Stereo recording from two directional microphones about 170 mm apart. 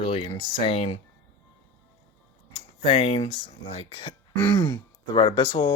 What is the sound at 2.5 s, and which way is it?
Speech, 35° left (ahead or behind).